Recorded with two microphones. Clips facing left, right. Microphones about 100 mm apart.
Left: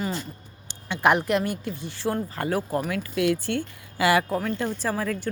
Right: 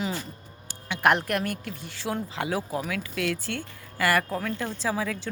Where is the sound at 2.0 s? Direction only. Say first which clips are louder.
Left 3 dB; centre (ahead or behind).